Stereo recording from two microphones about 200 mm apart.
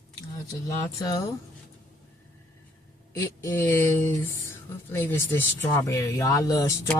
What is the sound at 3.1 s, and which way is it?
Speech, 15° left (ahead or behind).